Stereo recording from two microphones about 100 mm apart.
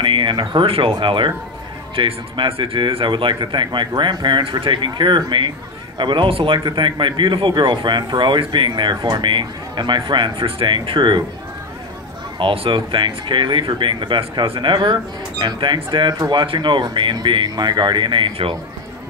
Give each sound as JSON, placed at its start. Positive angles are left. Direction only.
{"t": 0.0, "sound": "speech", "side_deg": -55}
{"t": 0.9, "sound": "a man's voice", "side_deg": -55}
{"t": 12.4, "sound": "speech", "side_deg": -60}